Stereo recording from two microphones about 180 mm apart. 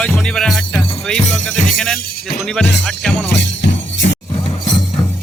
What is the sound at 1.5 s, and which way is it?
Speech, 45° left (ahead or behind).